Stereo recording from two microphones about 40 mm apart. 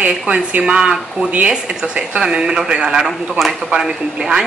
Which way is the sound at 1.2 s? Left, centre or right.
Right.